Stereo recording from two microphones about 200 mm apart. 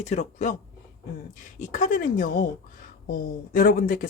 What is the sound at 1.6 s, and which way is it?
A woman's voice, 40° left (ahead or behind).